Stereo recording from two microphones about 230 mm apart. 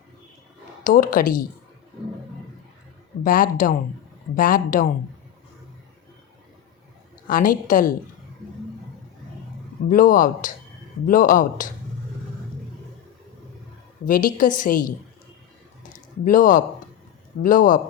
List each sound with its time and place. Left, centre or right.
0.9 s a woman's voice: left
3.2 s a woman's voice: left
7.3 s a woman's voice: left
9.9 s a woman's voice: left
14.0 s a woman's voice: left
15.9 s a sound: left
17.4 s a woman's voice: left